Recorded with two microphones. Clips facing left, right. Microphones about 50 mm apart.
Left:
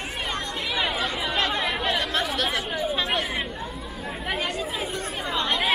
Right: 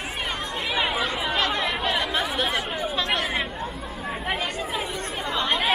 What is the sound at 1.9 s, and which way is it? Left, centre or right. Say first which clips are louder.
Chatter: right 1 dB; centre.